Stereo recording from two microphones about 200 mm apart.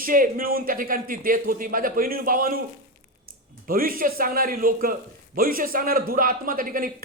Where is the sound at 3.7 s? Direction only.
45° right (ahead or behind).